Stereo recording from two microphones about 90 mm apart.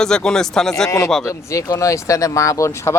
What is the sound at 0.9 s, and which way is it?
Speech, 35° left (ahead or behind).